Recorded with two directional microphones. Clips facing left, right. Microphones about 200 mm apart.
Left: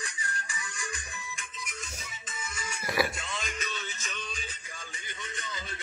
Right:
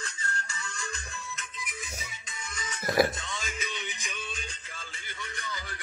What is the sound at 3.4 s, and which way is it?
Music, 5° right (ahead or behind).